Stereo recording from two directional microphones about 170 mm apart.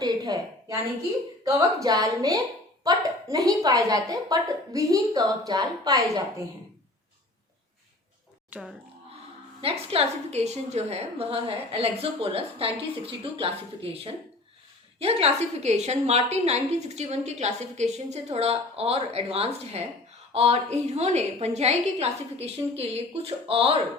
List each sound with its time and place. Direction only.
0.0 s a sound: 20° right (ahead or behind)
1.5 s a woman's voice: 20° right (ahead or behind)
8.4 s speech: 5° right (ahead or behind)
9.6 s a woman's voice: 35° right (ahead or behind)